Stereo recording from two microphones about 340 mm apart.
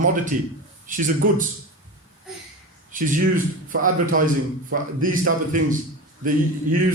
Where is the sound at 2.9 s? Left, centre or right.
Right.